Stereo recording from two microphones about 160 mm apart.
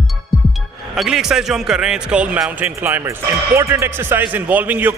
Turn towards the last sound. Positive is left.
turn(degrees=-10)  # may be behind; listen again after turning